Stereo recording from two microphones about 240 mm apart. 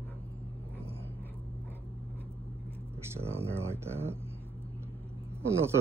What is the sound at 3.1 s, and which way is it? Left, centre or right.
Speech, centre.